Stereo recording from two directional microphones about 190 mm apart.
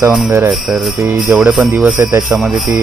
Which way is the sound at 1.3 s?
5° right (ahead or behind).